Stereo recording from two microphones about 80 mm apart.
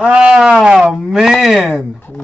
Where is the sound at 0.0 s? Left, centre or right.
Centre.